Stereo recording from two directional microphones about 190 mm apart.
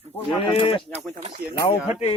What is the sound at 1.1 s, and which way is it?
Speech, 30° right (ahead or behind).